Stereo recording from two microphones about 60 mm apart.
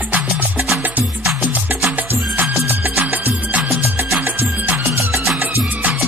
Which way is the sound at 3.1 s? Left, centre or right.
Right.